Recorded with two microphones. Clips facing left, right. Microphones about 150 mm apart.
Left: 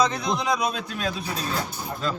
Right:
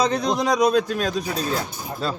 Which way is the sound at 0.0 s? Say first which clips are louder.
Right 3 dB; 35° right (ahead or behind).